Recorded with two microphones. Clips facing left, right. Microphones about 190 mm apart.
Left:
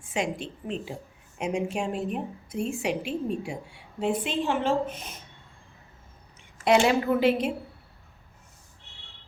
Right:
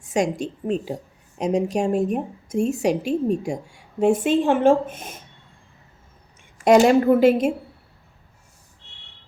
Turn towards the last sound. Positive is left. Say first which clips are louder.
# right 7 dB
turn(degrees=-45)  # may be behind; listen again after turning